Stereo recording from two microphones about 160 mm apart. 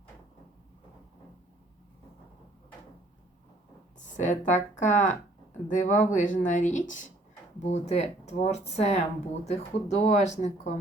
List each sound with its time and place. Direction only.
3.9 s speech: 50° left (ahead or behind)